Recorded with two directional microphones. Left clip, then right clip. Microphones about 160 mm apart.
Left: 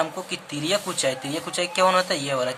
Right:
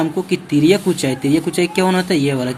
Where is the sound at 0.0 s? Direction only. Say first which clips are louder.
Right 8 dB; 10° right (ahead or behind).